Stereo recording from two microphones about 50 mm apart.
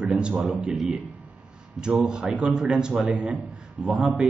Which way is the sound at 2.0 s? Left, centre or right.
Centre.